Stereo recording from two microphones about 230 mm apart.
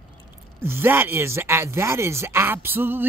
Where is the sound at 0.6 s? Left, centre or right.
Centre.